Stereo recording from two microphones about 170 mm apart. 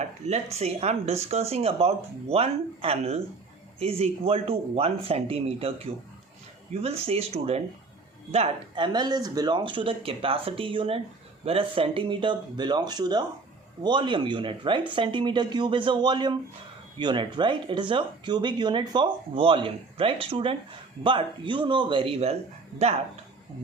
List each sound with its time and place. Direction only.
0.0 s speech: 40° right (ahead or behind)
7.0 s speech: 35° right (ahead or behind)